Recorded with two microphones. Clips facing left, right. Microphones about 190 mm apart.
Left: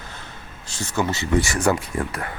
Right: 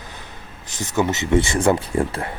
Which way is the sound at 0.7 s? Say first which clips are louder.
Right 3 dB; 20° right (ahead or behind).